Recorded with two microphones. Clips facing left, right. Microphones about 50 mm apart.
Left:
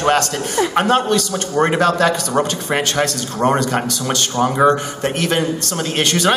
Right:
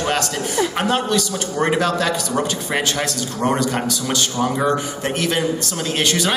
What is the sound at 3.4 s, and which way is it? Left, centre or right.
Speech, left.